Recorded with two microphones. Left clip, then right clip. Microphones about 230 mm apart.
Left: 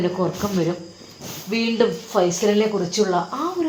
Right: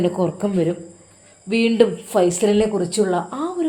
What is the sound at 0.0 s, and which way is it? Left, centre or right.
Speech, right.